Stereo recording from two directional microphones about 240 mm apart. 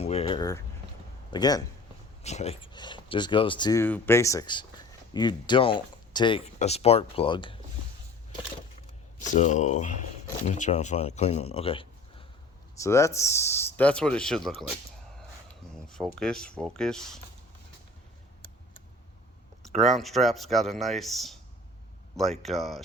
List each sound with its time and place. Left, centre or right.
0.0 s a sound: left
1.3 s speech: centre
2.2 s speech: left
9.2 s a man's voice: left; by 14.5 s centre
15.9 s speech: centre
19.8 s speech: centre